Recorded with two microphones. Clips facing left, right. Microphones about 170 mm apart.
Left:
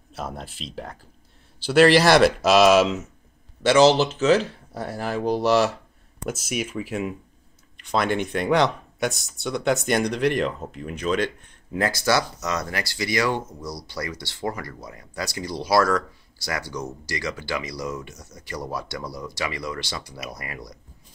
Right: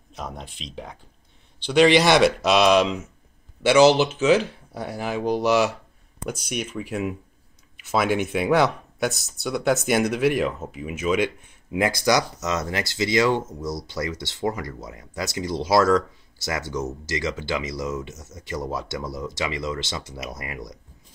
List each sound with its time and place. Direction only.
0.1 s speech: 5° left (ahead or behind); by 20.7 s 20° right (ahead or behind)